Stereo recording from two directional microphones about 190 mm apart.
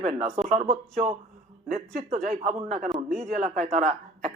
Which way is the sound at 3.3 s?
40° right (ahead or behind).